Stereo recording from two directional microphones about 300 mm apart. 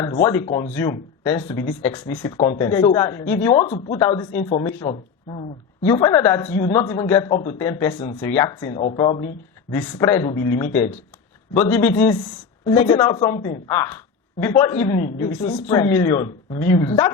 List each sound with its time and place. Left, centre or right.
0.0 s a woman's voice: centre
11.7 s a woman's voice: centre